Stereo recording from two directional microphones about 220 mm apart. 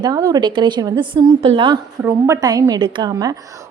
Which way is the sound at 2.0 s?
10° right (ahead or behind).